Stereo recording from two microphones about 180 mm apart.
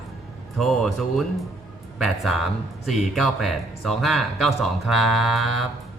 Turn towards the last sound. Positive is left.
turn(degrees=0)  # may be behind; listen again after turning